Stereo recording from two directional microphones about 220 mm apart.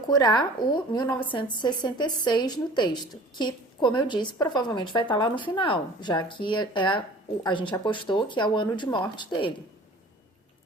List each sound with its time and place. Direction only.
0.1 s a woman's voice: 20° left (ahead or behind)